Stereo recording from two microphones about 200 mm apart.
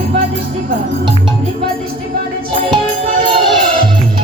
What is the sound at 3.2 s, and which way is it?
Music, 25° right (ahead or behind).